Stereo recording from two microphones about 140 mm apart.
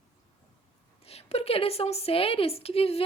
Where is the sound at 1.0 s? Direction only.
45° left (ahead or behind).